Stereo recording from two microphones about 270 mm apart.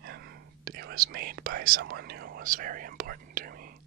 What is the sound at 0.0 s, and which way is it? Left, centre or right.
Whispering, right.